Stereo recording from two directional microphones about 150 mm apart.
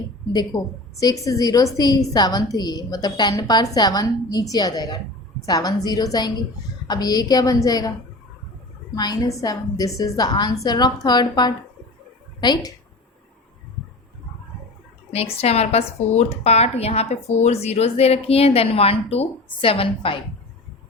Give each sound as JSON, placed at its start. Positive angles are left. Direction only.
{"t": 0.9, "sound": "a woman's voice", "side_deg": 25}
{"t": 9.0, "sound": "a woman's voice", "side_deg": 25}
{"t": 15.1, "sound": "speech", "side_deg": 40}